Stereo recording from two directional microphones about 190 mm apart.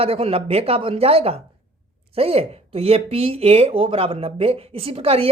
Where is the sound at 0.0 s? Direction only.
30° right (ahead or behind).